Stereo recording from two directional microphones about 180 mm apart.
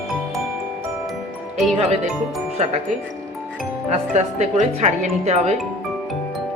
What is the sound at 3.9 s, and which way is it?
Speech, 40° right (ahead or behind).